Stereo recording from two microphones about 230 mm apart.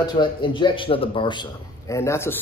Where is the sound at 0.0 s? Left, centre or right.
Centre.